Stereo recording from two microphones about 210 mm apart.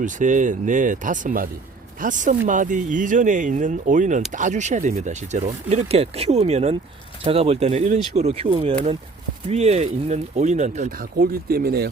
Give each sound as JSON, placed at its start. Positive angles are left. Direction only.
{"t": 0.0, "sound": "speech", "side_deg": -35}